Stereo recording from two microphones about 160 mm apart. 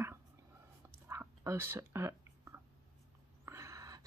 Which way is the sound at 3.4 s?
20° right (ahead or behind).